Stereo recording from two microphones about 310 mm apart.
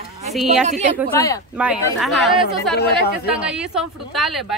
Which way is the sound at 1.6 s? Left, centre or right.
Centre.